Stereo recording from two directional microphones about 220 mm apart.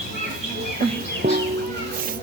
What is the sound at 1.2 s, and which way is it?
Music, 50° right (ahead or behind).